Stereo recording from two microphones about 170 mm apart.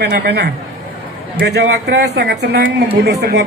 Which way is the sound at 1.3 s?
80° right.